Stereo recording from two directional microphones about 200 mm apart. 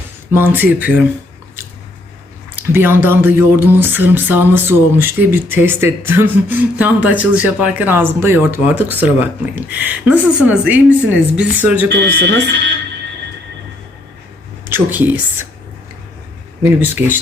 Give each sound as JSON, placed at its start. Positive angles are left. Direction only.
{"t": 0.3, "sound": "speech", "side_deg": -10}
{"t": 2.6, "sound": "speech", "side_deg": -10}
{"t": 11.9, "sound": "speech", "side_deg": -55}
{"t": 14.7, "sound": "speech", "side_deg": -10}
{"t": 16.6, "sound": "speech", "side_deg": -10}